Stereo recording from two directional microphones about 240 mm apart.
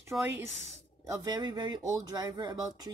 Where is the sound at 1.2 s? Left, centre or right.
Centre.